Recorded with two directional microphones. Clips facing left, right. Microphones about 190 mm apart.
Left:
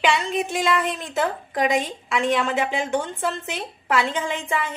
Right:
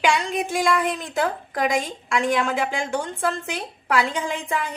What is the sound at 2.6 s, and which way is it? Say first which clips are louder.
Speech: left 1 dB; 5° left (ahead or behind).